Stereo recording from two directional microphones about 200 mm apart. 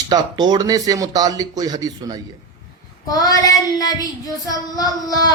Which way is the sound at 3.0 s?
20° left (ahead or behind).